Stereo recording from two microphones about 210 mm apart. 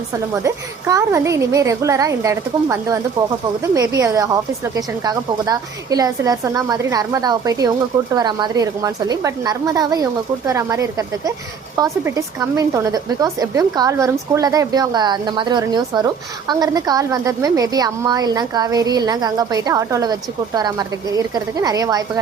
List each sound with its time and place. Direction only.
0.1 s speech: 15° right (ahead or behind)